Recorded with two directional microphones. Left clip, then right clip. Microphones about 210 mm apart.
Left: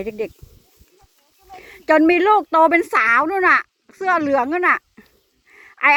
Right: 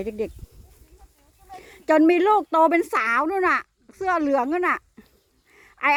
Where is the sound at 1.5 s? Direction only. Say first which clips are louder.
Left 4 dB; centre (ahead or behind).